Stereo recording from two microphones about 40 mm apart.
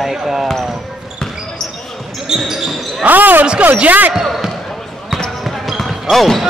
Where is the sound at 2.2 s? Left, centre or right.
Centre.